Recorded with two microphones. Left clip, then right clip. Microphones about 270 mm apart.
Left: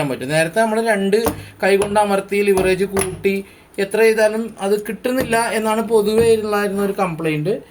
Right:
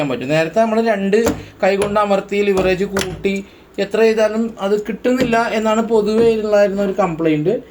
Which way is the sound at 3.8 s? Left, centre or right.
Left.